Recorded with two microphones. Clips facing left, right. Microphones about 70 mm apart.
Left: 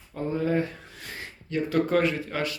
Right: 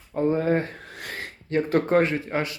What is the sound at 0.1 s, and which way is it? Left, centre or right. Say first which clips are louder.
Speech: right 5 dB; right.